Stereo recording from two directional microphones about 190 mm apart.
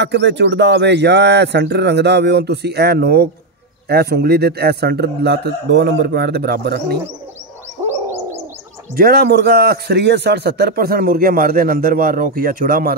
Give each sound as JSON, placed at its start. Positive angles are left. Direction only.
{"t": 0.0, "sound": "speech", "side_deg": -65}
{"t": 8.9, "sound": "a man's voice", "side_deg": -55}